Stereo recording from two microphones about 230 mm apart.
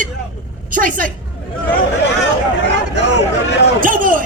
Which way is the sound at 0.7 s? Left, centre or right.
Right.